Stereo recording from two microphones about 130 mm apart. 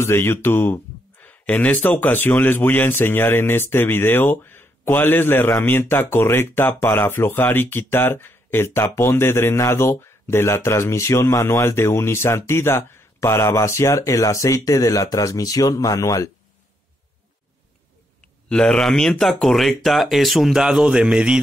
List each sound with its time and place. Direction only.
0.0 s speech: 20° left (ahead or behind)
18.5 s speech: 5° left (ahead or behind)